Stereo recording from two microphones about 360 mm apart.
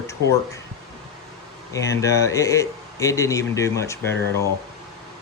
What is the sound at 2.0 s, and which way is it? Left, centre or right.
Speech, centre.